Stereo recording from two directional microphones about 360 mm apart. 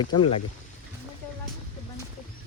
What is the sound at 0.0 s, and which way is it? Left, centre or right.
Speech, centre.